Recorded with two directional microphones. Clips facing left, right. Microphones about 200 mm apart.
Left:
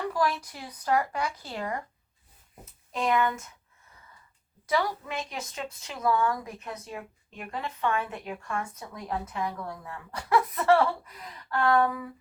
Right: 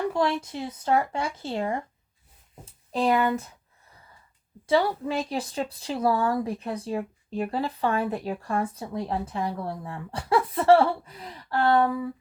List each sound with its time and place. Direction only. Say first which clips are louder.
0.1 s speech: right 3 dB; 25° right (ahead or behind)
4.6 s a woman's voice: right 5 dB; 30° right (ahead or behind)